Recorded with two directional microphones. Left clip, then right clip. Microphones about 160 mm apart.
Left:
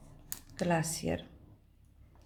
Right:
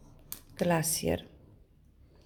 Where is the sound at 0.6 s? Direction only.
45° right (ahead or behind).